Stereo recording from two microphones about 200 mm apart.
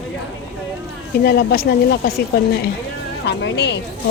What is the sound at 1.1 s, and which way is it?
Speech, 50° left (ahead or behind).